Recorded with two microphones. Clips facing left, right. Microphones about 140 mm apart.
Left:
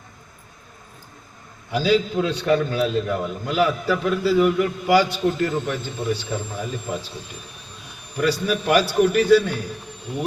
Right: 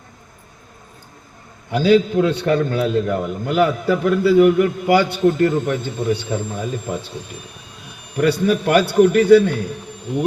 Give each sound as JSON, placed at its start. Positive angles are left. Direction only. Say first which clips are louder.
{"t": 1.7, "sound": "a man's voice", "louder": "right 5 dB", "side_deg": -55}
{"t": 8.1, "sound": "a man's voice", "louder": "right 5 dB", "side_deg": -55}